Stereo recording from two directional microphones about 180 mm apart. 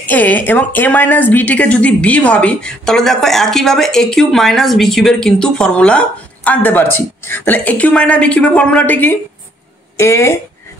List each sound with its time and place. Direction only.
0.0 s a woman's voice: 10° left (ahead or behind)